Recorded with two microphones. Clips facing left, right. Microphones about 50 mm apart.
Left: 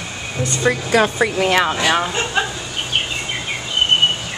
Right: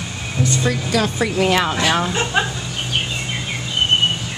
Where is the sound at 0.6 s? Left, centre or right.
Left.